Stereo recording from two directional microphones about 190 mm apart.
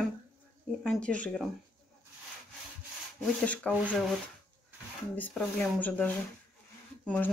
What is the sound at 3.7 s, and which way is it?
Speech, 10° right (ahead or behind).